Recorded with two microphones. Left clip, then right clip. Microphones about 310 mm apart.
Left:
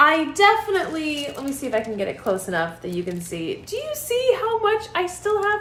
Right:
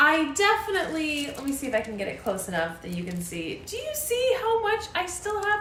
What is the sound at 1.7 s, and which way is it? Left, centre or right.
A woman's voice, left.